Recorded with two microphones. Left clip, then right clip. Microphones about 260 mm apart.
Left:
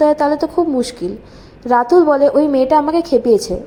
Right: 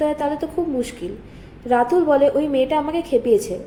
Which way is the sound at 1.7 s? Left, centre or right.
Centre.